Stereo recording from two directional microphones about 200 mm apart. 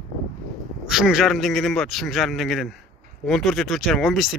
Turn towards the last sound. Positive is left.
turn(degrees=0)  # may be behind; listen again after turning